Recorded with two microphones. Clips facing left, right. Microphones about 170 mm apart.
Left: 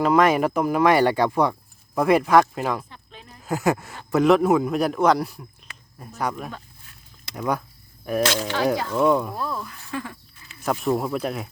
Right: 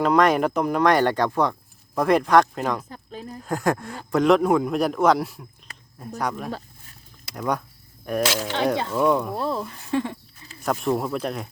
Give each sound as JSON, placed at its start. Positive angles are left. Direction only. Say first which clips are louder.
{"t": 0.0, "sound": "a man's voice", "louder": "even", "side_deg": 0}
{"t": 2.9, "sound": "a sound", "louder": "right 9 dB", "side_deg": -40}
{"t": 3.4, "sound": "a man's voice", "louder": "left 1 dB", "side_deg": 5}
{"t": 5.7, "sound": "cricket", "louder": "even", "side_deg": -40}
{"t": 6.1, "sound": "a man's voice", "louder": "even", "side_deg": 0}
{"t": 9.3, "sound": "speech", "louder": "right 3 dB", "side_deg": -30}
{"t": 10.6, "sound": "a man's voice", "louder": "even", "side_deg": 0}